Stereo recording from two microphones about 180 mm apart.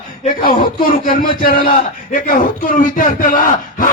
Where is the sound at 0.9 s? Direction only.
50° left (ahead or behind).